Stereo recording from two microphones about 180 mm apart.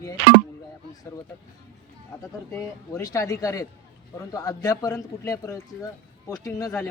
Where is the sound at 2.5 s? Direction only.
15° left (ahead or behind).